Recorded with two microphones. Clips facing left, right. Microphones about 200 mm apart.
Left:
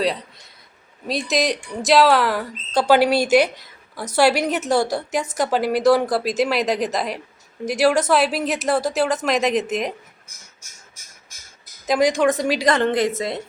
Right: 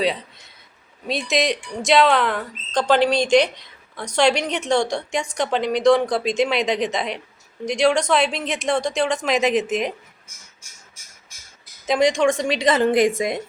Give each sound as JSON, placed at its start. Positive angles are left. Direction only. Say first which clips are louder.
{"t": 1.0, "sound": "speech", "louder": "even", "side_deg": 0}
{"t": 10.6, "sound": "a sound", "louder": "left 1 dB", "side_deg": 40}
{"t": 11.9, "sound": "speech", "louder": "even", "side_deg": 0}